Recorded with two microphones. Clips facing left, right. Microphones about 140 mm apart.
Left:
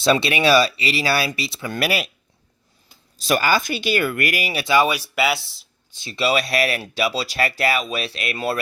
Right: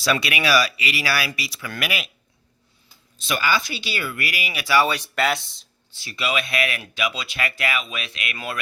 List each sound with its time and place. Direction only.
0.0 s speech: 25° left (ahead or behind)
3.2 s speech: 45° left (ahead or behind)
4.5 s speech: 20° left (ahead or behind); by 5.6 s 5° left (ahead or behind)
5.9 s speech: 25° left (ahead or behind)